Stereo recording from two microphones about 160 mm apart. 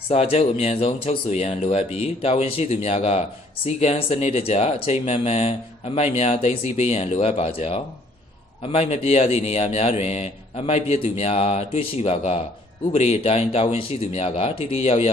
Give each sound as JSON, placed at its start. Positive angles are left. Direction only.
{"t": 0.1, "sound": "speech", "side_deg": 40}